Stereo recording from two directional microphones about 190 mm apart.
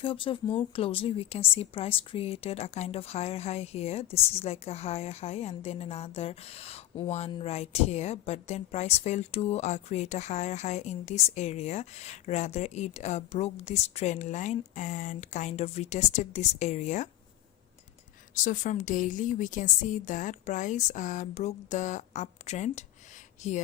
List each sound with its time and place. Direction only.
0.0 s speech: 30° left (ahead or behind)
18.3 s speech: 40° left (ahead or behind)